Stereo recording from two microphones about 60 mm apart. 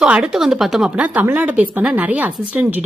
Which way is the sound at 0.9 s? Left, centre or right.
Right.